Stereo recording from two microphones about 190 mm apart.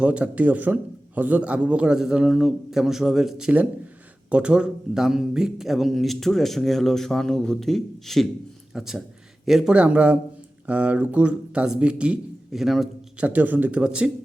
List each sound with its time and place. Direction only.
0.0 s a man's voice: 5° right (ahead or behind)